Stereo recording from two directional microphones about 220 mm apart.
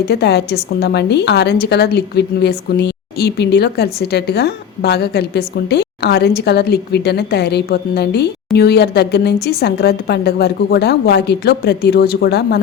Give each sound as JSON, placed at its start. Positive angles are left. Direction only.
{"t": 0.1, "sound": "a woman's voice", "side_deg": 50}